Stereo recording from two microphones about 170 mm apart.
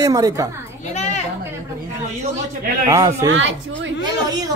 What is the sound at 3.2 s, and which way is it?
Speech, 90° right.